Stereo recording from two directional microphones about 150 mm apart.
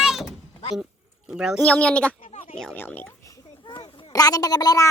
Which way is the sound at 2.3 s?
40° left (ahead or behind).